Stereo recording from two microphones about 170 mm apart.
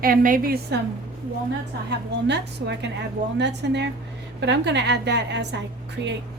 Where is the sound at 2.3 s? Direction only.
85° right.